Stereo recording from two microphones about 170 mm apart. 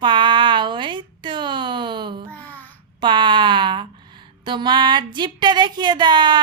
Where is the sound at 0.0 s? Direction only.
30° right (ahead or behind).